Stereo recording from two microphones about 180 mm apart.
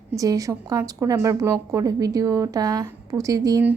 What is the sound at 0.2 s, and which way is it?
A woman's voice, 20° right (ahead or behind).